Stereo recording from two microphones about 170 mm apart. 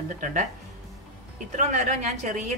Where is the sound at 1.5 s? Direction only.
45° right (ahead or behind).